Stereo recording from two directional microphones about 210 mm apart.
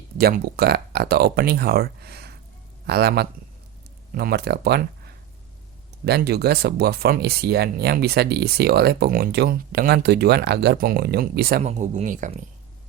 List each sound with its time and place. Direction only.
0.2 s speech: 45° right (ahead or behind)
11.6 s speech: 30° right (ahead or behind)